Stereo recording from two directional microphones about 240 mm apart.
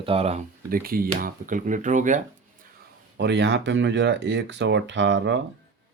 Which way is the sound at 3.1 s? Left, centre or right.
Right.